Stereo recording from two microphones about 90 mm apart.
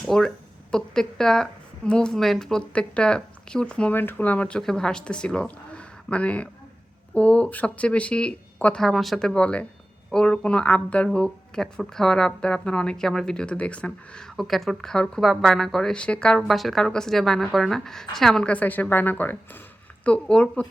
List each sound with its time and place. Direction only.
0.1 s a woman's voice: 5° left (ahead or behind)
8.8 s speech: centre (ahead or behind)